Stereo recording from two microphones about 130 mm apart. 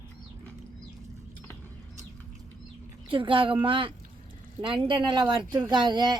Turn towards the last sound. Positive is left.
turn(degrees=-35)  # may be behind; listen again after turning